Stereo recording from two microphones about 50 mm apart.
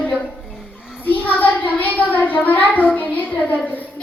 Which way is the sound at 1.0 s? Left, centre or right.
Left.